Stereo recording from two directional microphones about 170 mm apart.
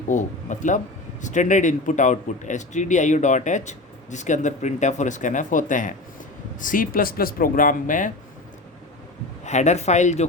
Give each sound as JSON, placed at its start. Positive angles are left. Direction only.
{"t": 0.1, "sound": "a man's voice", "side_deg": 45}
{"t": 9.4, "sound": "a man's voice", "side_deg": 45}